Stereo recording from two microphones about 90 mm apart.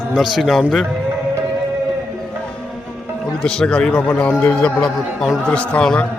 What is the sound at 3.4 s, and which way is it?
A man's voice, 10° left (ahead or behind).